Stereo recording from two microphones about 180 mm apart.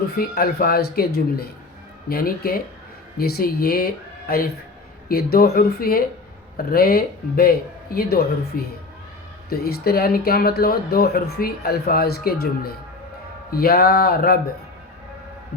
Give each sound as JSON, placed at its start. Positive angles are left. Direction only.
{"t": 0.2, "sound": "speech", "side_deg": 60}